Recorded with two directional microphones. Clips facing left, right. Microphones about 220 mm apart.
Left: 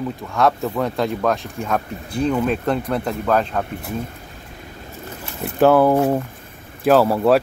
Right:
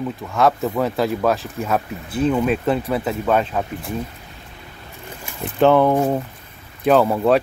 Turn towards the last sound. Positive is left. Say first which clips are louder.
# left 1 dB
turn(degrees=5)  # may be behind; listen again after turning